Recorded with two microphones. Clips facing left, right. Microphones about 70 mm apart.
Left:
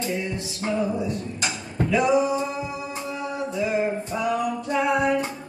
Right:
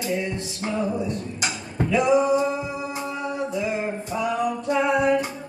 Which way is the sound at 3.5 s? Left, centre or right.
Centre.